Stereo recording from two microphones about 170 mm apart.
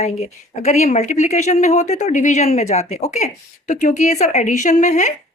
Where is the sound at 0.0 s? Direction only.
40° left (ahead or behind).